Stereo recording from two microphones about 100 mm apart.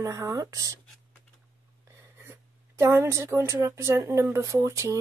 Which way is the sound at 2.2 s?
25° right (ahead or behind).